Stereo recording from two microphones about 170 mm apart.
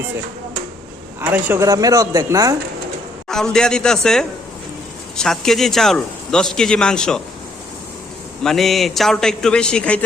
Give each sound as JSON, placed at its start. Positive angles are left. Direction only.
{"t": 1.2, "sound": "speech", "side_deg": -10}
{"t": 3.2, "sound": "speech", "side_deg": 5}
{"t": 8.4, "sound": "speech", "side_deg": 0}